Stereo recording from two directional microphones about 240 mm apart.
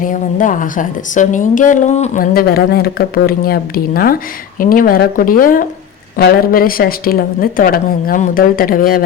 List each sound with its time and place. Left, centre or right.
0.0 s a woman's voice: left